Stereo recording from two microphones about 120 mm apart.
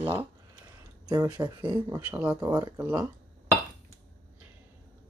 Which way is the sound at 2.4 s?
30° right (ahead or behind).